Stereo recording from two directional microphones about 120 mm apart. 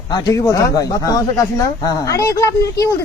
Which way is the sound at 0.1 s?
30° left (ahead or behind).